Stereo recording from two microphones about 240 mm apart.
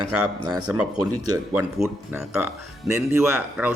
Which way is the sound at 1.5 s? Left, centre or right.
Centre.